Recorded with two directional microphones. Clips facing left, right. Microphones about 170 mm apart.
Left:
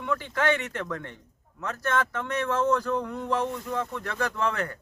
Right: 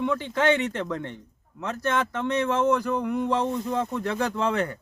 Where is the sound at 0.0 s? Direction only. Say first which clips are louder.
Right 4 dB; 20° right (ahead or behind).